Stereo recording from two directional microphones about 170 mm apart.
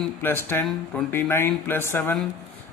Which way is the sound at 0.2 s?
15° left (ahead or behind).